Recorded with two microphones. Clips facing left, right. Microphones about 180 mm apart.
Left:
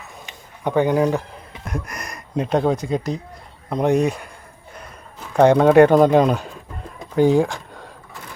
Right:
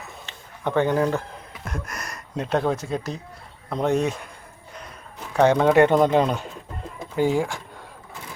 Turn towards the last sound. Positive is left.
turn(degrees=15)  # may be behind; listen again after turning